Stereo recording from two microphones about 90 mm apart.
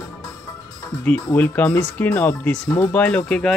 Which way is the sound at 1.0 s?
20° left (ahead or behind).